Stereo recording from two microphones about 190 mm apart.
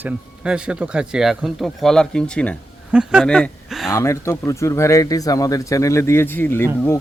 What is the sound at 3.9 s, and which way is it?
Speech, 15° left (ahead or behind).